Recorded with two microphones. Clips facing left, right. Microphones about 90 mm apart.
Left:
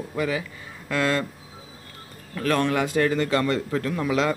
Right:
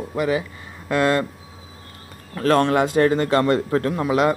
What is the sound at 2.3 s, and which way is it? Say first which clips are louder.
Speech: right 5 dB; 40° right (ahead or behind).